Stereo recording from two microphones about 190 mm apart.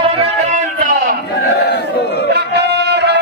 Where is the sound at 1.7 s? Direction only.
60° left (ahead or behind).